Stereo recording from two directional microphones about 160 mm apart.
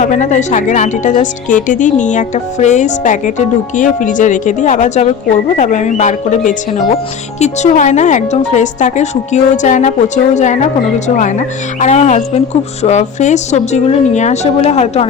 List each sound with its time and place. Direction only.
0.0 s speech: 50° left (ahead or behind)